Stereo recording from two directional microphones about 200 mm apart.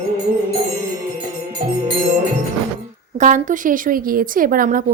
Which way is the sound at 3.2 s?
40° right (ahead or behind).